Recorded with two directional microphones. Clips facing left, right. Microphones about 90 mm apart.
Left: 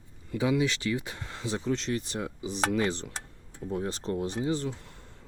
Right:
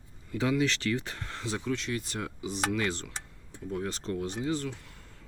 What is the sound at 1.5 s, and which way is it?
Speech, 30° left (ahead or behind).